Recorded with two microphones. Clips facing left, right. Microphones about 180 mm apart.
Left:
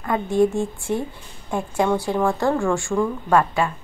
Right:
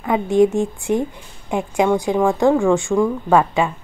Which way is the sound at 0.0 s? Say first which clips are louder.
Right 4 dB; 20° right (ahead or behind).